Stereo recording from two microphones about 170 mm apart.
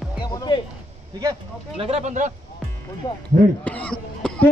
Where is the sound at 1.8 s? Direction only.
40° right (ahead or behind).